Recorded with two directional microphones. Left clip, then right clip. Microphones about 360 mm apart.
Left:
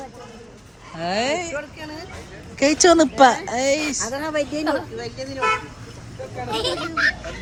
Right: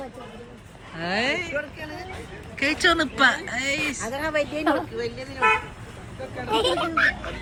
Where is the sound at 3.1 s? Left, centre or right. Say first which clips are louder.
Left 6 dB; left.